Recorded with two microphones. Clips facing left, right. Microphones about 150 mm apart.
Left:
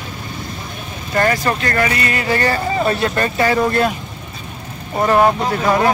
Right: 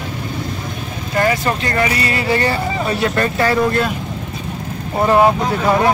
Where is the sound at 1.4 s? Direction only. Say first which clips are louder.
Even; 20° right (ahead or behind).